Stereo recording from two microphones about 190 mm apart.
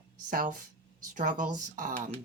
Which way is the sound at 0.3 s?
45° right (ahead or behind).